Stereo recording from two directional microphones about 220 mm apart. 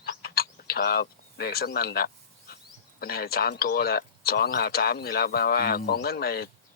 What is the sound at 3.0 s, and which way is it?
Speech, 45° left (ahead or behind).